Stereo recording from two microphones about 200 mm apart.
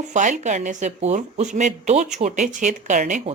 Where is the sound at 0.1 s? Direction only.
40° right (ahead or behind).